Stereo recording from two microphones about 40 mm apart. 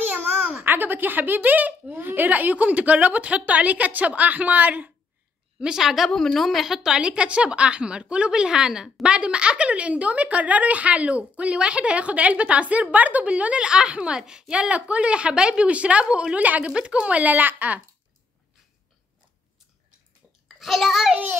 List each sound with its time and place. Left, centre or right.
0.0 s a child's voice: right
5.6 s a woman's voice: centre
6.8 s a woman's voice: centre
9.0 s a woman's voice: right
20.4 s a child's voice: centre